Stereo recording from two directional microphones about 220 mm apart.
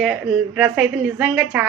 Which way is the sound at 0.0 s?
5° right (ahead or behind).